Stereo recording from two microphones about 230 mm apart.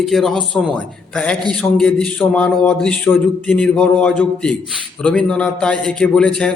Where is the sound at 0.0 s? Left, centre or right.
Centre.